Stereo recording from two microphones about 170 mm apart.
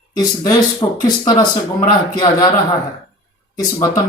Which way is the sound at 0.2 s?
20° left (ahead or behind).